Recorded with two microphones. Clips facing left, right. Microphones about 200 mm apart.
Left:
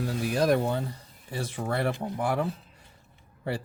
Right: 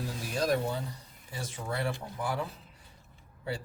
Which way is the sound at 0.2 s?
65° left (ahead or behind).